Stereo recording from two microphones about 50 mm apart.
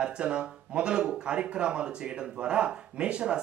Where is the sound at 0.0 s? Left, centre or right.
Right.